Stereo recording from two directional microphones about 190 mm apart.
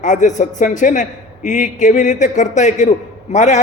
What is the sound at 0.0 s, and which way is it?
Speech, 40° left (ahead or behind).